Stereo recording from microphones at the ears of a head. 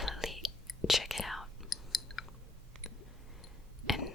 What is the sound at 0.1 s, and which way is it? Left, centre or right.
Whispering, centre.